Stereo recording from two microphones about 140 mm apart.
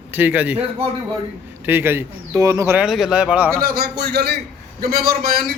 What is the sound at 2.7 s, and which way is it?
Speech, 5° right (ahead or behind).